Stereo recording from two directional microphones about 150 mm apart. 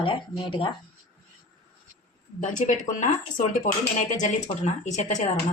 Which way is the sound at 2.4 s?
55° left (ahead or behind).